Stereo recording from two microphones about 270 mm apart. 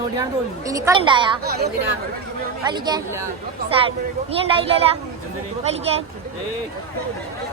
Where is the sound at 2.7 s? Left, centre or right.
Centre.